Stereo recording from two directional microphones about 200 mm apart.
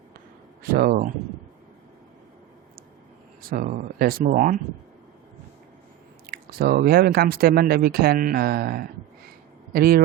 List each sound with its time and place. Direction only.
0.6 s speech: 45° right (ahead or behind)
3.5 s speech: 40° right (ahead or behind)
6.2 s speech: 50° right (ahead or behind)